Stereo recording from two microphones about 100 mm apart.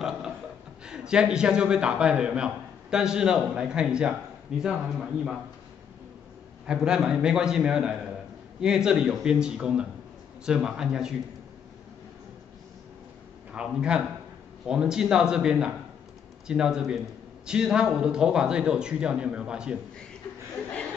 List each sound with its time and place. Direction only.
0.8 s a man's voice: 10° right (ahead or behind)
6.6 s a man's voice: 10° right (ahead or behind)
13.5 s a man's voice: 10° right (ahead or behind)